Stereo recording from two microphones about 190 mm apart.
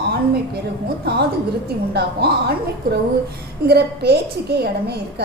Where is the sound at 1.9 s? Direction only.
60° right (ahead or behind).